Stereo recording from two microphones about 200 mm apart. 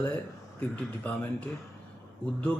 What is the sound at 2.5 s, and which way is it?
Music, 5° left (ahead or behind).